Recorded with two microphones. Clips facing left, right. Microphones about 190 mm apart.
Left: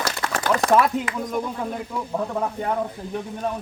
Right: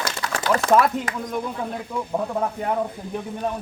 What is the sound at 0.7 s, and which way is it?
Speech, centre (ahead or behind).